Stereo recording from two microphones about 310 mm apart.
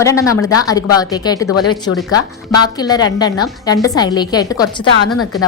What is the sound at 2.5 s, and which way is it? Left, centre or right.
Speech, centre.